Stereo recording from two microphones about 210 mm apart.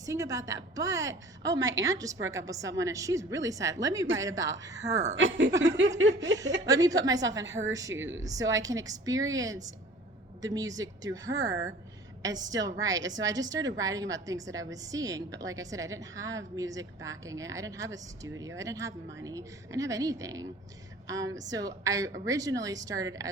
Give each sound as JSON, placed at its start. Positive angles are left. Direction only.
{"t": 0.0, "sound": "a woman's voice", "side_deg": -15}
{"t": 5.1, "sound": "speech", "side_deg": -65}
{"t": 6.8, "sound": "a woman's voice", "side_deg": -15}
{"t": 7.9, "sound": "speech", "side_deg": -65}
{"t": 8.2, "sound": "a woman's voice", "side_deg": -15}